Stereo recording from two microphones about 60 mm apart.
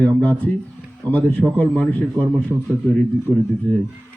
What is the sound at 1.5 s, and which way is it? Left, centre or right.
Speech, left.